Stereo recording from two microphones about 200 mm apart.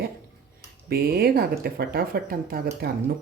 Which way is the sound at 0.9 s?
50° right (ahead or behind).